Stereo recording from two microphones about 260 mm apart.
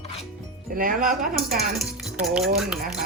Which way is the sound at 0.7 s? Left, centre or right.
Right.